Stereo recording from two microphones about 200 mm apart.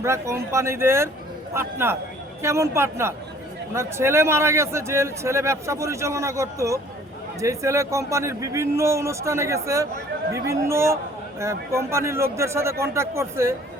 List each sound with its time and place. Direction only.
0.0 s a man's voice: 15° right (ahead or behind)